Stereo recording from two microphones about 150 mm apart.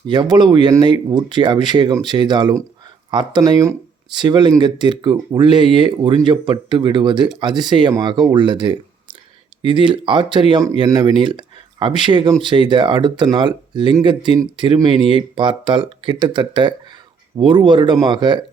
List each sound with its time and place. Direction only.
0.1 s speech: 30° right (ahead or behind)